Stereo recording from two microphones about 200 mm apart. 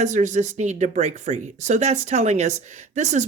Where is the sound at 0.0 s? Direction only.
35° right (ahead or behind).